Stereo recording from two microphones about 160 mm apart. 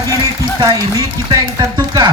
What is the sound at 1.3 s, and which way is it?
Speech, 25° right (ahead or behind).